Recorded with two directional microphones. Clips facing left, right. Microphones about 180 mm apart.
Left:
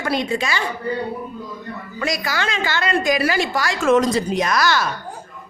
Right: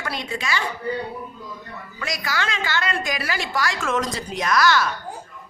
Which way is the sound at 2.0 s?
30° left (ahead or behind).